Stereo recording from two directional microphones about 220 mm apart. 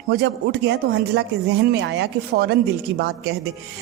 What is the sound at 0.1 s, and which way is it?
A woman's voice, 50° right (ahead or behind).